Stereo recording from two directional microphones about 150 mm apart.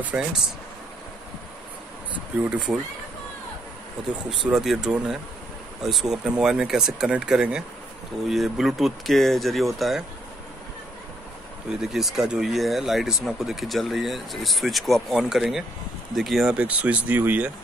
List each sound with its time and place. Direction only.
0.0 s speech: 5° right (ahead or behind)
2.5 s speech: 5° right (ahead or behind)
4.5 s speech: 5° right (ahead or behind)
11.8 s speech: centre (ahead or behind)